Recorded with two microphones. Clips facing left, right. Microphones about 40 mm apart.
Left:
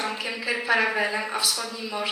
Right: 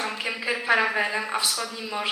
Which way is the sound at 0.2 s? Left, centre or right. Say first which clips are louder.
Even; right.